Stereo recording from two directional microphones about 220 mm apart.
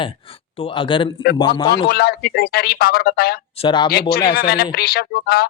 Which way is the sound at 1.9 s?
45° left (ahead or behind).